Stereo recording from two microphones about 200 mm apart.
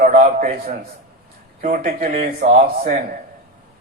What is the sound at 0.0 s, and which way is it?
Speech, 45° right (ahead or behind).